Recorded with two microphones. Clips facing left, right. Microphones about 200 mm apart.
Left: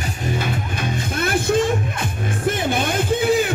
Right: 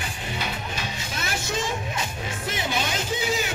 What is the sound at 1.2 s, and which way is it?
Music, 55° left (ahead or behind).